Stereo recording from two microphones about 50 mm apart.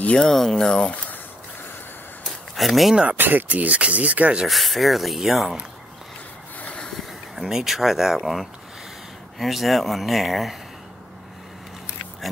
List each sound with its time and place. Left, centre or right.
0.0 s speech: left
0.3 s speech: centre
2.5 s speech: centre
3.2 s speech: right
4.5 s speech: centre
7.3 s speech: centre